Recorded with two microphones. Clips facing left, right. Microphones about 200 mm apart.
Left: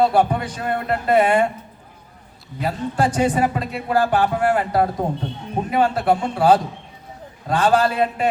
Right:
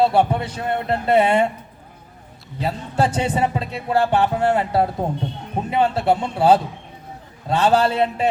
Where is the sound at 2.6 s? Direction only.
25° right (ahead or behind).